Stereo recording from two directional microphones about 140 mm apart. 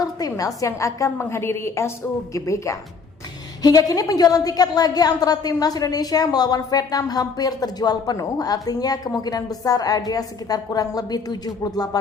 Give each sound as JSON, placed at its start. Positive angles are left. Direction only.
{"t": 0.0, "sound": "a woman's voice", "side_deg": 25}